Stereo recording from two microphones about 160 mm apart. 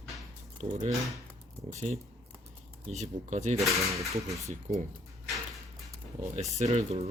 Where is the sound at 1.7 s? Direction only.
45° right (ahead or behind).